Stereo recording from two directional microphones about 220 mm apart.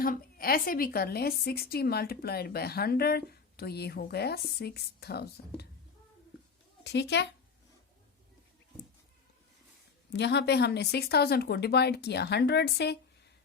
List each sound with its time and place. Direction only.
0.0 s a woman's voice: 40° left (ahead or behind)
6.8 s a woman's voice: 50° left (ahead or behind)
10.1 s a woman's voice: 50° left (ahead or behind)